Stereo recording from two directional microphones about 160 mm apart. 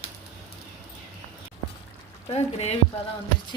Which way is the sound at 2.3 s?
40° left (ahead or behind).